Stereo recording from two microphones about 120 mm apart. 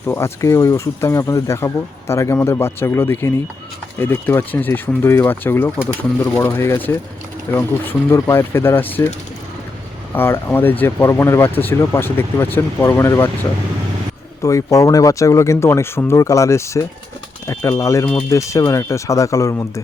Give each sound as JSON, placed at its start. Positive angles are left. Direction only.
{"t": 0.0, "sound": "speech", "side_deg": 20}
{"t": 10.2, "sound": "speech", "side_deg": 20}
{"t": 14.4, "sound": "speech", "side_deg": 30}